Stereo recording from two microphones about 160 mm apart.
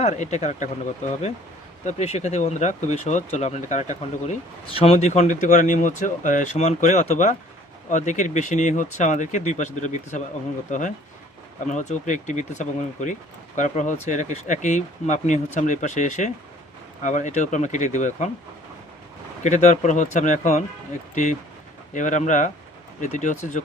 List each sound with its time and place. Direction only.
0.0 s speech: 45° left (ahead or behind)
1.8 s speech: 45° left (ahead or behind)
4.7 s speech: 35° left (ahead or behind)
19.4 s speech: 50° left (ahead or behind)
21.9 s speech: 50° left (ahead or behind)